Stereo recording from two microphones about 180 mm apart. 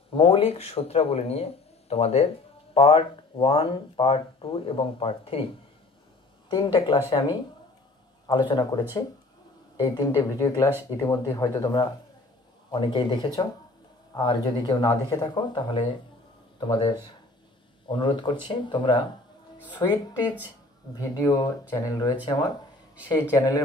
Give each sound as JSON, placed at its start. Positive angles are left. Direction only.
{"t": 0.1, "sound": "speech", "side_deg": 30}
{"t": 6.5, "sound": "speech", "side_deg": 25}